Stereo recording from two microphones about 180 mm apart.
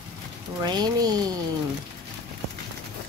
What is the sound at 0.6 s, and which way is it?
Speech, 25° right (ahead or behind).